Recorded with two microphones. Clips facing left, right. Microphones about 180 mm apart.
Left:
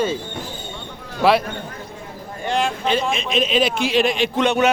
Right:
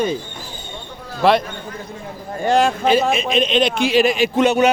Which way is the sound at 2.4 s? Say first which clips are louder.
Right 6 dB; 45° right (ahead or behind).